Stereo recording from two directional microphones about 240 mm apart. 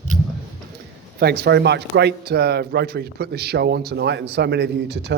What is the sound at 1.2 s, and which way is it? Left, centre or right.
A man's voice, right.